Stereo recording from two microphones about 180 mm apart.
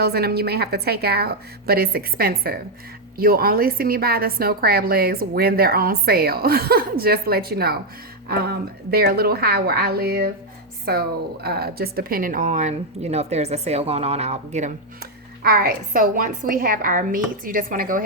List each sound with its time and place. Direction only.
0.0 s a woman's voice: 60° right (ahead or behind); by 14.7 s 40° right (ahead or behind)
15.4 s a woman's voice: 55° right (ahead or behind)